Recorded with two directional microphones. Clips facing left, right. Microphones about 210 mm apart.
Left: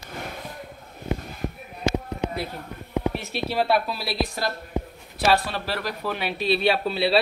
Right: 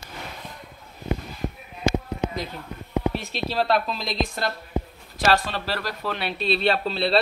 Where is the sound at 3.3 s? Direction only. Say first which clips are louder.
Left 1 dB; 10° left (ahead or behind).